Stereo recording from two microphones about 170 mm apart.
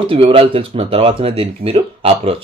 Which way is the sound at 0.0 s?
30° right (ahead or behind).